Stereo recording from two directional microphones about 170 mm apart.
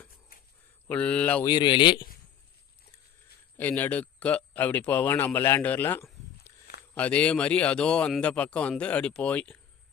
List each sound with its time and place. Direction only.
0.9 s speech: 5° left (ahead or behind)
1.5 s speech: 25° left (ahead or behind)
3.6 s speech: 10° left (ahead or behind)